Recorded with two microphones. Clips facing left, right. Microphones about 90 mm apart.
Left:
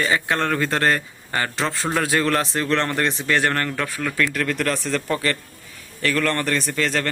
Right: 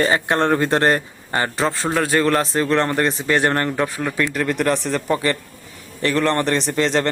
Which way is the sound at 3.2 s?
20° right (ahead or behind).